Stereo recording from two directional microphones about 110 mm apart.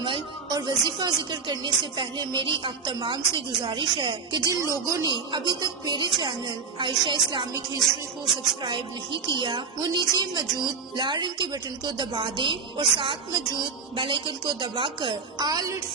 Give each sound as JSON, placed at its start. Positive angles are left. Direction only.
{"t": 0.5, "sound": "speech", "side_deg": -40}
{"t": 4.4, "sound": "speech", "side_deg": -30}
{"t": 5.0, "sound": "speech", "side_deg": -45}
{"t": 8.6, "sound": "speech", "side_deg": -50}